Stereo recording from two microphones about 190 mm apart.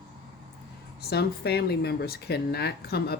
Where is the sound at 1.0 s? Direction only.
60° left (ahead or behind).